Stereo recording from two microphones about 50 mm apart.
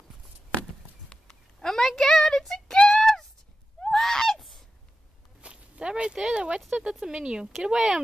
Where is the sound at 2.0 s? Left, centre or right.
Centre.